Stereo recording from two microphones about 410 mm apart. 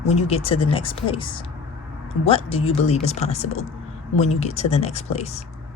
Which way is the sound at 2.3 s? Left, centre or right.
Centre.